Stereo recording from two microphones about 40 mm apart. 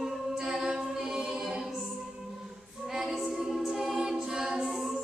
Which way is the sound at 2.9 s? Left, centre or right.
Centre.